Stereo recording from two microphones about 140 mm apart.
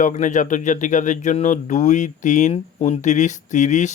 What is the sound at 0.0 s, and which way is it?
Speech, 60° left (ahead or behind).